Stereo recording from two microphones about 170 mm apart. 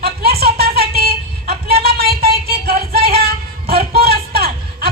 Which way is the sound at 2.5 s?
65° right (ahead or behind).